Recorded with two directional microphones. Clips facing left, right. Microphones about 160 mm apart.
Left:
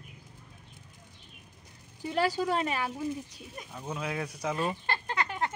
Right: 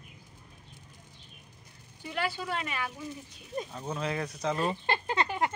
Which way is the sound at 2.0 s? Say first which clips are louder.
Left 6 dB; 35° left (ahead or behind).